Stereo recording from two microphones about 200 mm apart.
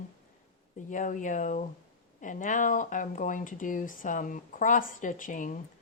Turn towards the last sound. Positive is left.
turn(degrees=40)  # may be behind; listen again after turning